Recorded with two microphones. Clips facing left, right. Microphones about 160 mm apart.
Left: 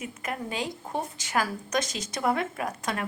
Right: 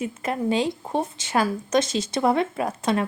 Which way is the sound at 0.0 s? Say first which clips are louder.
Right 8 dB; 30° right (ahead or behind).